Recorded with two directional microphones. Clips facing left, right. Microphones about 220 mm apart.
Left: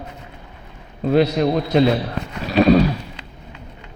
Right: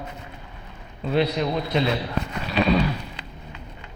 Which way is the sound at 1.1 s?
45° left (ahead or behind).